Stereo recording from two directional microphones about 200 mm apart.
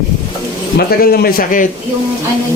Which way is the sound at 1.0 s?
50° left (ahead or behind).